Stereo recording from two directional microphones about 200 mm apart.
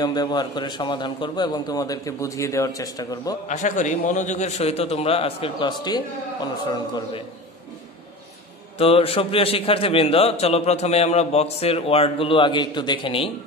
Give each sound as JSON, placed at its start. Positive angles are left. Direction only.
{"t": 0.0, "sound": "a man's voice", "side_deg": 20}
{"t": 3.4, "sound": "a man's voice", "side_deg": 40}
{"t": 8.7, "sound": "a man's voice", "side_deg": 30}